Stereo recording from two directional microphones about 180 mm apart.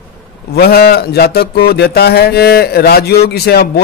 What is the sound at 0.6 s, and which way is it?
A man's voice, 60° left (ahead or behind).